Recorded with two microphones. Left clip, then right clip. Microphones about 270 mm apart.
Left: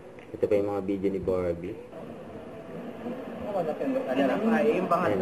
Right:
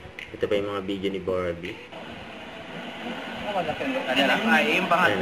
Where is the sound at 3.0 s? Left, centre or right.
Centre.